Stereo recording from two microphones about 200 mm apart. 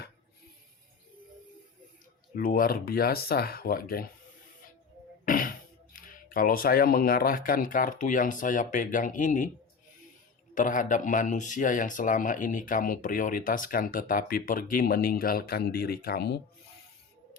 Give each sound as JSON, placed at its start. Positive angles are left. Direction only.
{"t": 2.3, "sound": "speech", "side_deg": 45}
{"t": 5.2, "sound": "speech", "side_deg": 45}
{"t": 10.5, "sound": "speech", "side_deg": 40}